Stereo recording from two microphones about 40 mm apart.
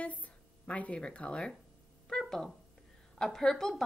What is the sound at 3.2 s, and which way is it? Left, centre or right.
Speech, centre.